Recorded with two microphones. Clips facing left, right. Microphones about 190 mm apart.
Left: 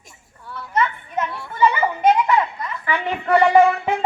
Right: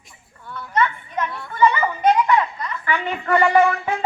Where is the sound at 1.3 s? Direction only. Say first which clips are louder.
Right 1 dB; 10° left (ahead or behind).